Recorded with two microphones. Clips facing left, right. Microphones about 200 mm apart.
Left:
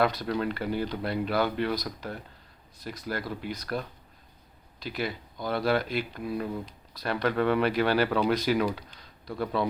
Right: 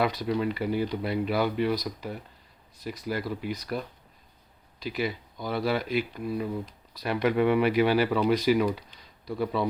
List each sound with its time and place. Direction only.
0.0 s speech: 5° right (ahead or behind)